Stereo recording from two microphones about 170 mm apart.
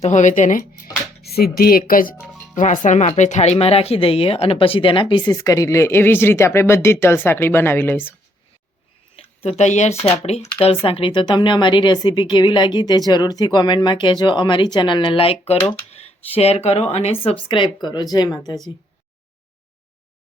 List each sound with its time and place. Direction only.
0.0 s speech: 45° left (ahead or behind)
1.2 s speech: 65° left (ahead or behind); by 8.1 s 10° left (ahead or behind)
9.1 s a sound: 35° left (ahead or behind)
10.2 s speech: 40° left (ahead or behind); by 18.7 s 25° left (ahead or behind)